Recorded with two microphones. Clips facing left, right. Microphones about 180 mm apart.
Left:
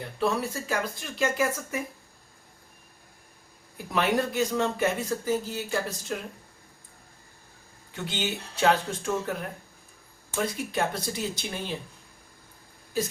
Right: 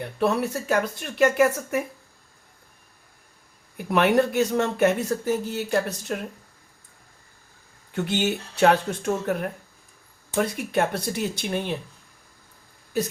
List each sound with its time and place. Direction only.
0.2 s speech: 60° right (ahead or behind)
3.8 s speech: 60° right (ahead or behind)
7.9 s speech: 60° right (ahead or behind)